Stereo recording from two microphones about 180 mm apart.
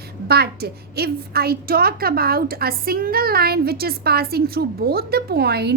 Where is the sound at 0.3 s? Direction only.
60° right (ahead or behind).